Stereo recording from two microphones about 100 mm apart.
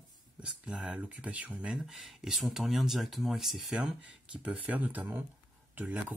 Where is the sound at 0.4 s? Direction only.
10° right (ahead or behind).